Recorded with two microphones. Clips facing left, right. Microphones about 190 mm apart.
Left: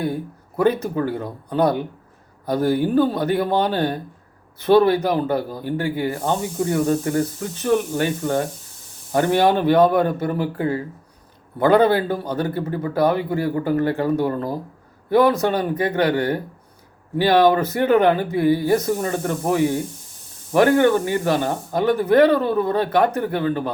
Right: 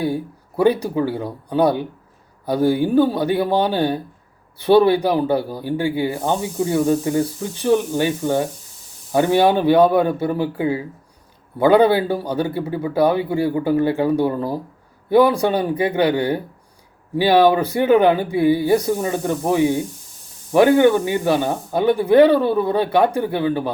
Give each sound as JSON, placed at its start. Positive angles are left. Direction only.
{"t": 0.5, "sound": "a man's voice", "side_deg": -10}
{"t": 2.6, "sound": "speech", "side_deg": -25}
{"t": 3.0, "sound": "a man's voice", "side_deg": -10}
{"t": 5.8, "sound": "speech", "side_deg": -25}
{"t": 6.1, "sound": "a man's voice", "side_deg": -15}
{"t": 10.3, "sound": "speech", "side_deg": -25}
{"t": 11.6, "sound": "a man's voice", "side_deg": -10}
{"t": 13.1, "sound": "speech", "side_deg": -25}
{"t": 13.5, "sound": "a man's voice", "side_deg": -15}